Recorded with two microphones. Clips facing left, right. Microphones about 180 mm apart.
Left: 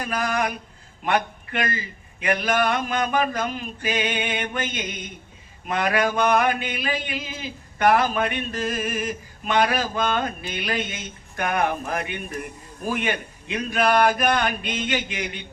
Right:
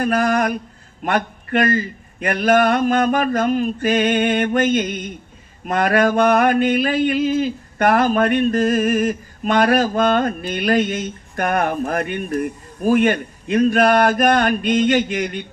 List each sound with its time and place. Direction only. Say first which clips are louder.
0.0 s mantra: right 7 dB; 50° right (ahead or behind)